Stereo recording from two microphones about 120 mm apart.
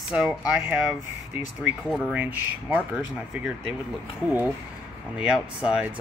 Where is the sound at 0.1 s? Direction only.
10° right (ahead or behind).